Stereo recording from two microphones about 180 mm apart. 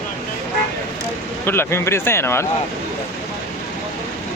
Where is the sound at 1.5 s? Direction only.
15° left (ahead or behind).